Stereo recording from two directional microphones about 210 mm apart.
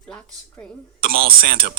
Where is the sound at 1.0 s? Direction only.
45° right (ahead or behind).